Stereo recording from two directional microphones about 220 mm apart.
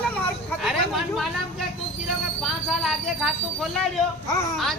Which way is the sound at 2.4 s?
Centre (ahead or behind).